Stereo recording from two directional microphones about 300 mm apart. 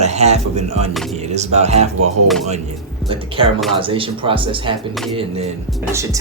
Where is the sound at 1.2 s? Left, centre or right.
Right.